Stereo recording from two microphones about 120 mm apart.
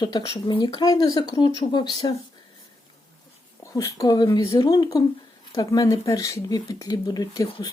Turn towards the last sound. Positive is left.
turn(degrees=30)  # may be behind; listen again after turning